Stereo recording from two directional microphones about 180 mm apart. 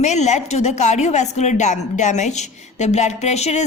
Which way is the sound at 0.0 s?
40° left (ahead or behind).